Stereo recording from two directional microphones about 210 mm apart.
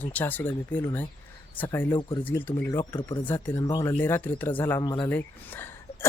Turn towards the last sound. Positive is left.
turn(degrees=10)  # may be behind; listen again after turning